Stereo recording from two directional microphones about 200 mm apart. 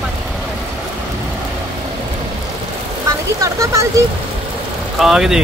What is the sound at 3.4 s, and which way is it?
Speech, 15° right (ahead or behind).